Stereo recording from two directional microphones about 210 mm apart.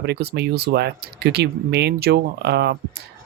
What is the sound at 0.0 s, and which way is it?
Speech, 50° right (ahead or behind).